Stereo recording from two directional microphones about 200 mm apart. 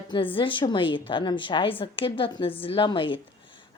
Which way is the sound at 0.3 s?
25° left (ahead or behind).